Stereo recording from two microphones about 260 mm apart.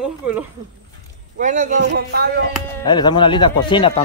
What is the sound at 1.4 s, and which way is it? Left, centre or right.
Speech, right.